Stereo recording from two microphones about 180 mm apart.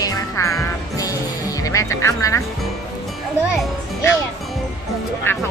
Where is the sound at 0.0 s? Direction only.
20° left (ahead or behind).